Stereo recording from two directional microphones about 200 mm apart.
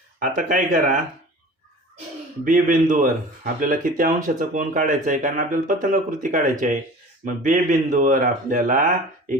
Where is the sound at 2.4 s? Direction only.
40° right (ahead or behind).